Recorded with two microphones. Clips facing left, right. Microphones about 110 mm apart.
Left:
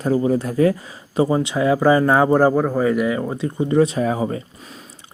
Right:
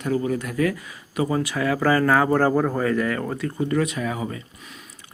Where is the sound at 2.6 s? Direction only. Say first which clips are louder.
Left 3 dB; 10° left (ahead or behind); by 4.4 s 35° left (ahead or behind).